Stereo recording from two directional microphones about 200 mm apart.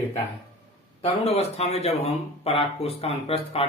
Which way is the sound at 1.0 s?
30° left (ahead or behind).